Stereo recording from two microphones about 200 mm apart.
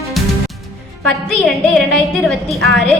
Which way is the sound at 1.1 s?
Centre (ahead or behind).